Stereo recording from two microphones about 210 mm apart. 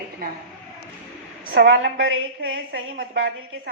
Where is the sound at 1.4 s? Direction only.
60° right (ahead or behind).